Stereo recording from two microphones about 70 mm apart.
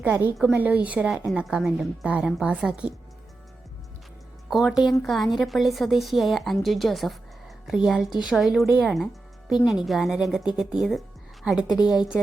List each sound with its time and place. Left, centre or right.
0.0 s a woman's voice: right; by 2.0 s centre
2.0 s a woman's voice: centre
4.4 s a woman's voice: centre
5.0 s a woman's voice: centre
7.7 s a woman's voice: centre